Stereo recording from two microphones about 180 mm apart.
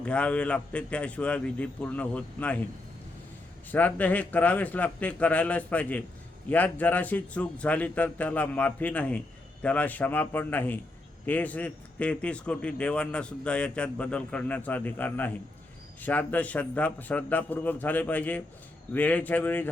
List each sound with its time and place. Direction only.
0.0 s a man's voice: 5° left (ahead or behind)
3.7 s a man's voice: 10° left (ahead or behind)